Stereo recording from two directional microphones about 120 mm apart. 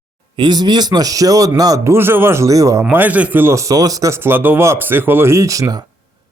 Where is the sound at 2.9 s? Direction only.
15° right (ahead or behind).